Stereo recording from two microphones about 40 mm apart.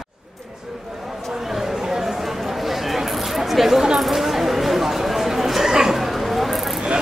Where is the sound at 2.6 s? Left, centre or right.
Centre.